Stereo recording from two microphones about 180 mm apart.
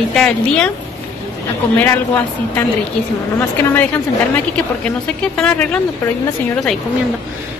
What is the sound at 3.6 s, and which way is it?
Speech, 10° left (ahead or behind).